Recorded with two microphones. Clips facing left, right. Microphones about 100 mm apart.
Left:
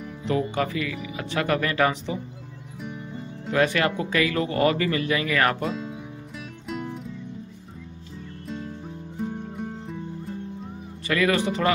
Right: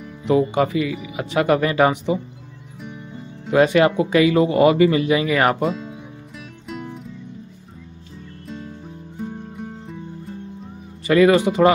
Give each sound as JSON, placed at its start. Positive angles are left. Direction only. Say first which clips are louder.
{"t": 0.2, "sound": "speech", "louder": "right 7 dB", "side_deg": -20}
{"t": 3.5, "sound": "speech", "louder": "right 7 dB", "side_deg": -25}
{"t": 5.6, "sound": "speech", "louder": "right 6 dB", "side_deg": 0}
{"t": 6.7, "sound": "music", "louder": "even", "side_deg": 0}
{"t": 8.5, "sound": "music", "louder": "even", "side_deg": 0}
{"t": 11.1, "sound": "speech", "louder": "right 8 dB", "side_deg": -25}